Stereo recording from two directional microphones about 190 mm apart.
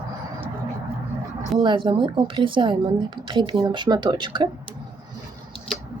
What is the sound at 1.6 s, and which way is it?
A woman's voice, 25° right (ahead or behind).